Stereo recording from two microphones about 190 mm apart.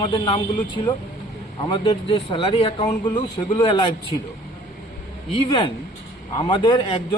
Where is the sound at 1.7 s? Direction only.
25° left (ahead or behind).